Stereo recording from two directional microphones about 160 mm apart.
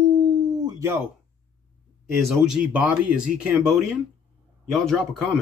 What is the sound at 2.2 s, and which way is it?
Speech, centre (ahead or behind).